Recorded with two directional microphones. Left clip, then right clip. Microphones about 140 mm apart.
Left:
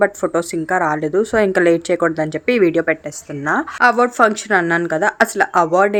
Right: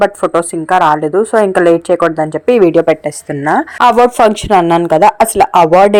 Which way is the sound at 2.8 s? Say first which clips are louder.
Right 8 dB; 35° right (ahead or behind).